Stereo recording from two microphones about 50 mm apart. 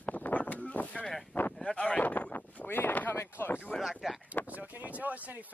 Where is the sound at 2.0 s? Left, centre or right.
Left.